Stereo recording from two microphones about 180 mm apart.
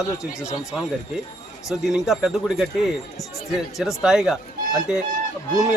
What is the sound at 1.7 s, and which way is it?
A man's voice, centre (ahead or behind).